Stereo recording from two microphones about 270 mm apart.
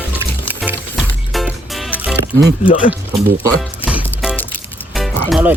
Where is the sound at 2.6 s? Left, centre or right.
Centre.